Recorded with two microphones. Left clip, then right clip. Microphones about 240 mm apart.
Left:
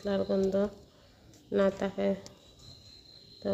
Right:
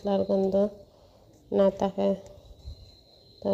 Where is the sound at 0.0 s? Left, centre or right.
Centre.